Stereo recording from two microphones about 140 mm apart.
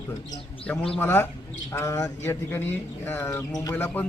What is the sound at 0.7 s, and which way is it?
A man's voice, 10° left (ahead or behind).